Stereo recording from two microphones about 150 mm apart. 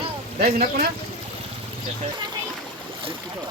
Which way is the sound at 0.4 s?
90° right.